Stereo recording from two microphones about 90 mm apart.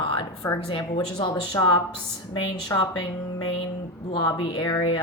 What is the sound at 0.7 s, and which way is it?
A woman's voice, 60° left (ahead or behind).